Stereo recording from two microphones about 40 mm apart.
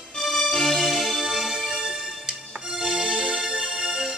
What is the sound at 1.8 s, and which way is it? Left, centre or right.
Music, right.